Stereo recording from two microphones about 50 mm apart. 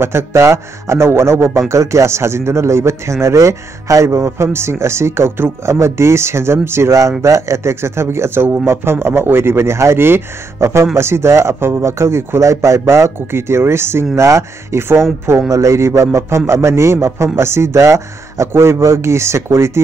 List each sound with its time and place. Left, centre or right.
0.0 s speech: right
1.7 s speech: right
15.2 s speech: right
18.5 s speech: right